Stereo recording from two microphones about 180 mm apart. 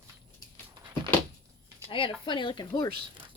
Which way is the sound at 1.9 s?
30° left (ahead or behind).